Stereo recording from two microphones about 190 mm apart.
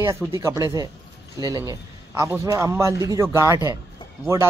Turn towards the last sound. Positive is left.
turn(degrees=-15)  # may be behind; listen again after turning